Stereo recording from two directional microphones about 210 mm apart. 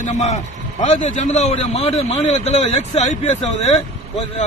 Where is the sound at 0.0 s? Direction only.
35° left (ahead or behind).